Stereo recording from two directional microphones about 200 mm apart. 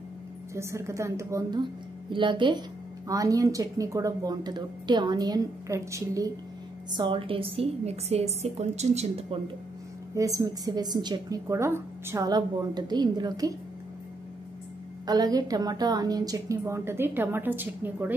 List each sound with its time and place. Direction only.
0.6 s a woman's voice: 15° right (ahead or behind); by 9.4 s 30° right (ahead or behind)
10.1 s a woman's voice: 15° right (ahead or behind)
15.0 s a woman's voice: 20° right (ahead or behind)